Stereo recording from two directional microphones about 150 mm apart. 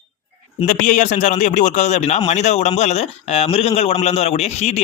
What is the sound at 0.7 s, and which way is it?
Speech, 55° left (ahead or behind).